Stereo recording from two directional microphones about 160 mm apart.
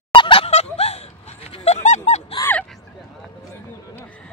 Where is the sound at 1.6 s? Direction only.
45° left (ahead or behind).